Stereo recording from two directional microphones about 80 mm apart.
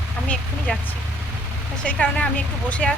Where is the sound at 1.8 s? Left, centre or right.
Centre.